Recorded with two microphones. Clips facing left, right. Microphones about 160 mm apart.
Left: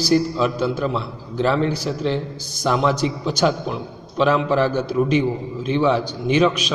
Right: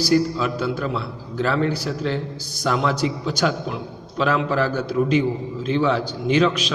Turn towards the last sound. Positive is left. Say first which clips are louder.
# left 1 dB
turn(degrees=15)  # may be behind; listen again after turning